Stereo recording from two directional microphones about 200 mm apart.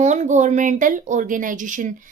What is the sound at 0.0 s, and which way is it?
A woman's voice, 35° right (ahead or behind).